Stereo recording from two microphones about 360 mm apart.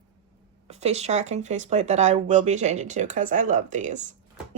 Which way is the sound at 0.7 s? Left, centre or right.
Centre.